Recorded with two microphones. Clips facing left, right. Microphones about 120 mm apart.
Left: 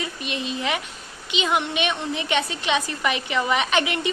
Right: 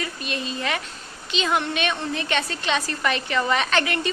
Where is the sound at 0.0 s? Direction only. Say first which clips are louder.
Even; 20° left (ahead or behind).